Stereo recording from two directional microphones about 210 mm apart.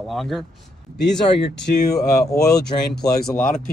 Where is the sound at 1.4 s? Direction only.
55° left (ahead or behind).